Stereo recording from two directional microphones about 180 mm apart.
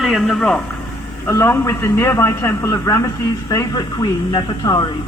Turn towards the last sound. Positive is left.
turn(degrees=25)  # may be behind; listen again after turning